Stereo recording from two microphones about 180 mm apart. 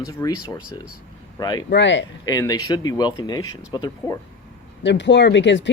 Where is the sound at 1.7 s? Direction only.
85° left.